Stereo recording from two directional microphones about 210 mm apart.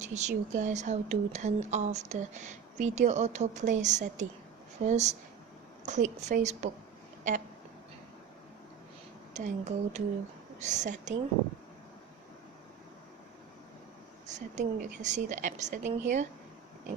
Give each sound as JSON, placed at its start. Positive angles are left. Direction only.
{"t": 0.0, "sound": "speech", "side_deg": -35}
{"t": 9.3, "sound": "speech", "side_deg": -35}
{"t": 14.3, "sound": "speech", "side_deg": -35}